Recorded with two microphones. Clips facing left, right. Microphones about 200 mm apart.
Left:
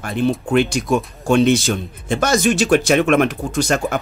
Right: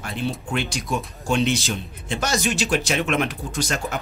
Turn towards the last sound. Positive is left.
turn(degrees=55)  # may be behind; listen again after turning